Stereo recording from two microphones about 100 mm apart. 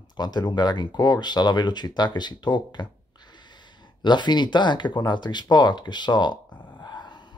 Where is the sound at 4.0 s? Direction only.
50° left (ahead or behind).